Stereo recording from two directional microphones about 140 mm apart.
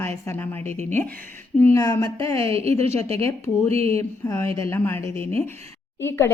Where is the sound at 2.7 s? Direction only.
50° right (ahead or behind).